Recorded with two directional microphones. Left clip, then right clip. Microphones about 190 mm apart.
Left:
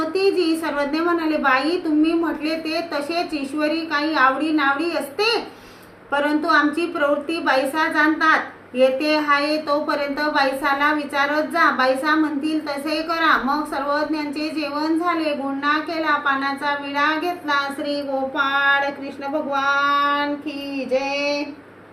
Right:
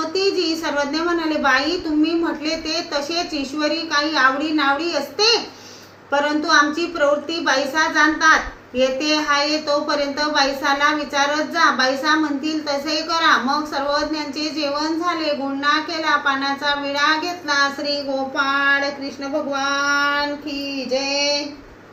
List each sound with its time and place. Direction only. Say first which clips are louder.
0.1 s a woman's voice: left 2 dB; 20° left (ahead or behind)
18.3 s child singing: even; 10° left (ahead or behind)